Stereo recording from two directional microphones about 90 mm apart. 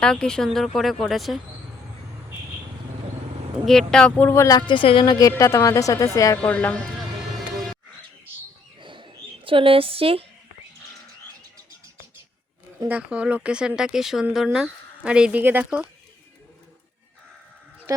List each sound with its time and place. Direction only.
0.0 s speech: 10° left (ahead or behind)
3.7 s speech: 5° left (ahead or behind)
4.2 s speech: 25° left (ahead or behind)
4.7 s a woman's voice: 75° left (ahead or behind)
5.0 s a woman's voice: 40° left (ahead or behind)
6.3 s speech: 15° left (ahead or behind)
7.5 s music: centre (ahead or behind)
8.8 s a sound: 65° right (ahead or behind); by 10.2 s 90° right
12.9 s speech: 15° right (ahead or behind)